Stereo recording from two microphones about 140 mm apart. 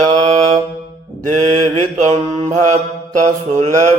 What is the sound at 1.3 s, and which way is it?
Mantra, 55° right (ahead or behind).